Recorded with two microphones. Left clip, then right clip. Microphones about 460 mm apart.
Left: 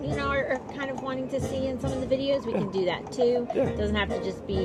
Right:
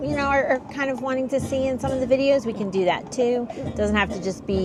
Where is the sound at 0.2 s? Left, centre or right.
Right.